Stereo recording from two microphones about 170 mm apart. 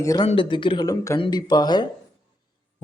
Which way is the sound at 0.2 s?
30° left (ahead or behind).